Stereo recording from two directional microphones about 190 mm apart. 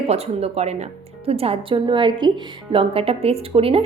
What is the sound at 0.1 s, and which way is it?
A woman's voice, 35° right (ahead or behind).